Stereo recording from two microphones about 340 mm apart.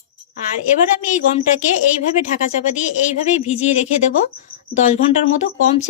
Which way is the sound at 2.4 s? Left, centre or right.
Left.